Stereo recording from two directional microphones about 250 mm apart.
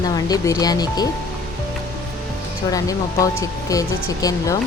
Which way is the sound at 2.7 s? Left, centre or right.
Centre.